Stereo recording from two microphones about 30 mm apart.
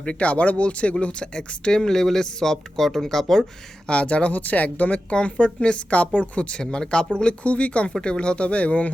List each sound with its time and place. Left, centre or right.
0.0 s a woman's voice: left
1.2 s speech: left
1.9 s speech: centre
3.8 s a woman's voice: left
4.3 s a woman's voice: left
5.1 s a woman's voice: left
6.6 s speech: left
7.4 s a woman's voice: left
8.0 s speech: left